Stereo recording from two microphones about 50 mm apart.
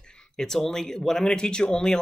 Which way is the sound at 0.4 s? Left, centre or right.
Centre.